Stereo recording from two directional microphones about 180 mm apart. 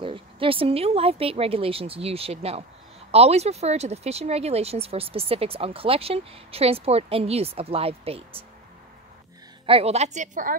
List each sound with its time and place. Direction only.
0.0 s speech: 30° right (ahead or behind)
9.7 s speech: 35° right (ahead or behind)